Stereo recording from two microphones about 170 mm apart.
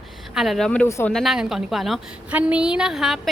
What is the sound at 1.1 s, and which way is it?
A woman's voice, centre (ahead or behind).